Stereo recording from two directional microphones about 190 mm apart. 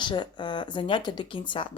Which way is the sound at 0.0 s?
25° left (ahead or behind).